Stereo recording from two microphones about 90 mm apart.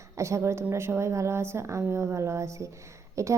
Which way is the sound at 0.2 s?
30° right (ahead or behind).